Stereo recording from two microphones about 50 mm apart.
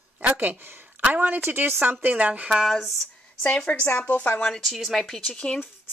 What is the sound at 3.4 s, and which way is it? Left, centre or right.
Speech, left.